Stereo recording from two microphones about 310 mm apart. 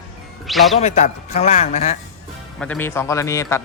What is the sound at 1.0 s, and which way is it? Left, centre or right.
Speech, left.